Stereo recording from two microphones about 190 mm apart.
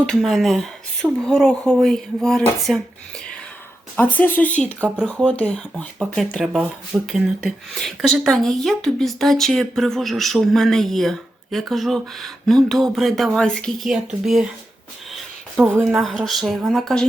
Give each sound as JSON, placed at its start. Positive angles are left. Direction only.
{"t": 0.0, "sound": "speech", "side_deg": 0}
{"t": 3.9, "sound": "a woman's voice", "side_deg": 10}
{"t": 15.6, "sound": "speech", "side_deg": -5}